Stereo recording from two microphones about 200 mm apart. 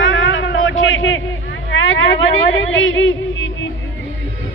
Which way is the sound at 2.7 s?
75° left (ahead or behind).